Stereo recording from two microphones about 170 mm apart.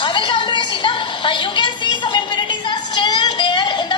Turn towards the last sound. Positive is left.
turn(degrees=25)  # may be behind; listen again after turning